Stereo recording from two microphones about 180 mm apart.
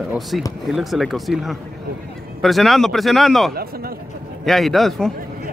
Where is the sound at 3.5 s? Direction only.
55° right (ahead or behind).